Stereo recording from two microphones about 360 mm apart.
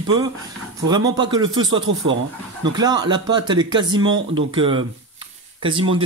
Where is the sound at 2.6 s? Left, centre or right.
Centre.